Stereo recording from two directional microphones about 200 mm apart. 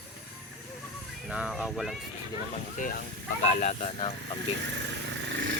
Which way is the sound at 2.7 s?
45° left (ahead or behind).